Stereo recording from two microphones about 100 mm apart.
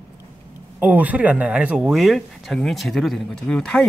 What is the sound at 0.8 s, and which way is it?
Speech, 15° right (ahead or behind).